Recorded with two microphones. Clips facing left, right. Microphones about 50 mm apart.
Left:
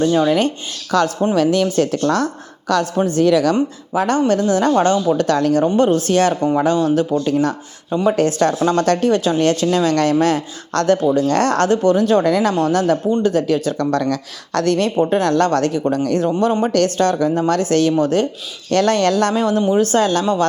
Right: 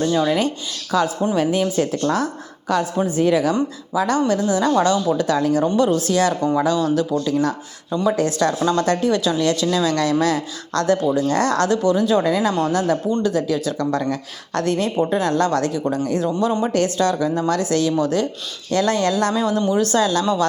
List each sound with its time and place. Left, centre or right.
0.1 s speech: left
1.4 s speech: left
1.6 s speech: left
3.5 s speech: left
5.6 s speech: left
8.1 s speech: left
8.9 s speech: left
9.1 s speech: left
12.5 s speech: left
14.0 s speech: left
14.9 s speech: left
18.7 s speech: left
19.4 s speech: left
19.6 s speech: left